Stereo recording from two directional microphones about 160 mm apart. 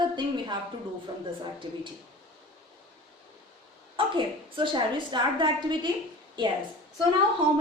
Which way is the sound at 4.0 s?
30° right (ahead or behind).